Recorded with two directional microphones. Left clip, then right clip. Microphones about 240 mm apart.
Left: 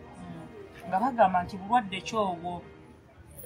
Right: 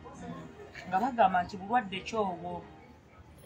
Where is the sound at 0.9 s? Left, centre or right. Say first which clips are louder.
Left 2 dB; centre.